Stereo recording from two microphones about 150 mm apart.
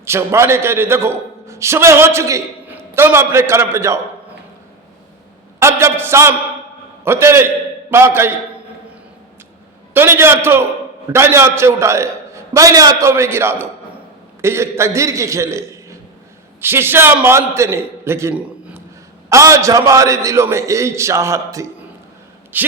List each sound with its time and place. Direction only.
0.0 s a man's voice: 15° right (ahead or behind)
5.5 s a sound: 15° right (ahead or behind)
7.0 s a man's voice: 15° right (ahead or behind)
9.9 s a man's voice: 15° right (ahead or behind)